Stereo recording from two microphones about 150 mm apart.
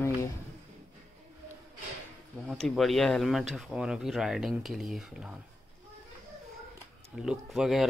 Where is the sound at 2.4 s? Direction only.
Centre (ahead or behind).